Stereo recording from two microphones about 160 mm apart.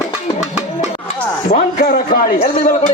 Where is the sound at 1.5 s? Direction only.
55° left (ahead or behind).